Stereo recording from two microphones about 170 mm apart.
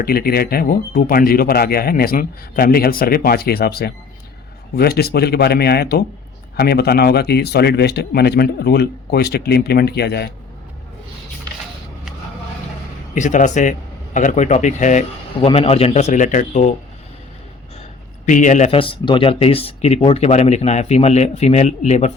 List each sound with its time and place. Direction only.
0.0 s a man's voice: 60° left (ahead or behind)
13.1 s a man's voice: 45° left (ahead or behind)
15.4 s speech: 35° left (ahead or behind)
18.3 s speech: 50° left (ahead or behind)